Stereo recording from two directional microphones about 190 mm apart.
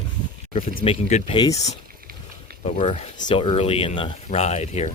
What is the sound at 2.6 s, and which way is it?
Speech, 35° left (ahead or behind).